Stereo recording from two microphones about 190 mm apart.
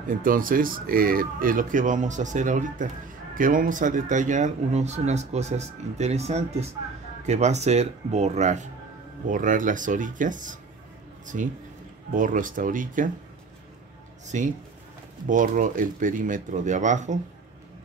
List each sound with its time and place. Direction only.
0.1 s a man's voice: 45° right (ahead or behind)
14.2 s a man's voice: 40° right (ahead or behind)